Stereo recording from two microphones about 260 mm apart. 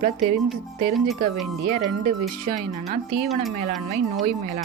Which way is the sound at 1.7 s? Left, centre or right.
Right.